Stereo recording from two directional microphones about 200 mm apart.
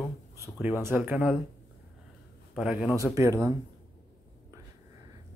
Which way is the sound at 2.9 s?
15° right (ahead or behind).